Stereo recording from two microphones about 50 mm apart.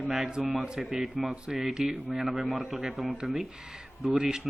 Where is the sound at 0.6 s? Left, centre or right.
Centre.